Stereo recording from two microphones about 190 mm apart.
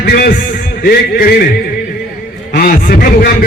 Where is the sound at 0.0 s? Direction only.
55° left (ahead or behind).